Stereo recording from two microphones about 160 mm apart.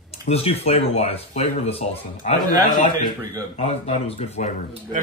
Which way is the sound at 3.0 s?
20° right (ahead or behind).